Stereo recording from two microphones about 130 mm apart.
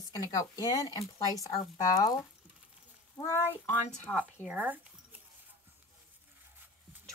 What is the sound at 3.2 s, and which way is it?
Speech, 20° left (ahead or behind).